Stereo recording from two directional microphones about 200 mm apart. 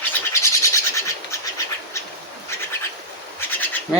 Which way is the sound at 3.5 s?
10° left (ahead or behind).